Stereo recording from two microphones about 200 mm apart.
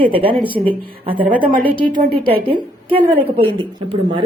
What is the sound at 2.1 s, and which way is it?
Speech, 50° right (ahead or behind).